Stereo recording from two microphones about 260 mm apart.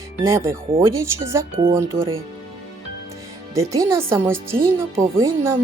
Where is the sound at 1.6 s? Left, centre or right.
Right.